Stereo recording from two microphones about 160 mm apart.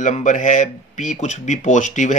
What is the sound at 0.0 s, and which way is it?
Speech, 50° left (ahead or behind).